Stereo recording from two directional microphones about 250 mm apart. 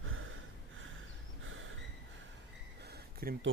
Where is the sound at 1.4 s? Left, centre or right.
Right.